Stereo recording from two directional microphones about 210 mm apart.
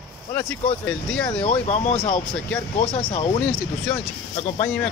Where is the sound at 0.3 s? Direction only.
5° left (ahead or behind).